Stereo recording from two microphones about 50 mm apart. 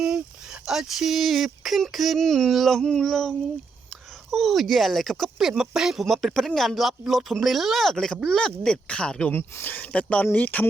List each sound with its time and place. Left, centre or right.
0.0 s speech: centre
7.9 s speech: centre
9.3 s speech: left
9.9 s speech: left